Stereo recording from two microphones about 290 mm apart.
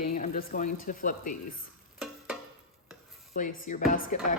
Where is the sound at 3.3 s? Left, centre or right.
Left.